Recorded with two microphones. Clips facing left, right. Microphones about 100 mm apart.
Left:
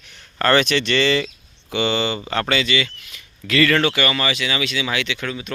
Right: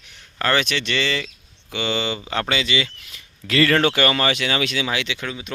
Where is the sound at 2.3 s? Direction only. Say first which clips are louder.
Left 2 dB; 15° right (ahead or behind); by 4.9 s 45° right (ahead or behind).